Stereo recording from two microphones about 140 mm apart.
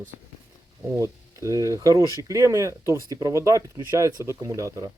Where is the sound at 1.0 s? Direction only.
20° right (ahead or behind).